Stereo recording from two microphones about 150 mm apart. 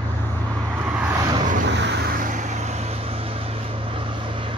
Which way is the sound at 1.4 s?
60° right (ahead or behind).